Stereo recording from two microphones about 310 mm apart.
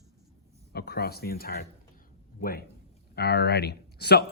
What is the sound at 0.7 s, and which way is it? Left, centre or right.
Speech, left.